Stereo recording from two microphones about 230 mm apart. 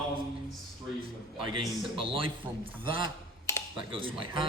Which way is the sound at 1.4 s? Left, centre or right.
Right.